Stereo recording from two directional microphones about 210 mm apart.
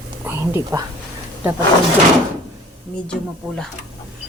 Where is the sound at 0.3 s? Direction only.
10° right (ahead or behind).